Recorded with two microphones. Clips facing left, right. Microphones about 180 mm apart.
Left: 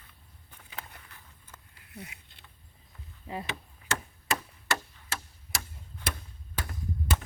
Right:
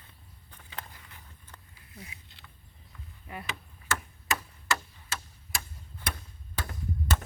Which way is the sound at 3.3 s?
25° left (ahead or behind).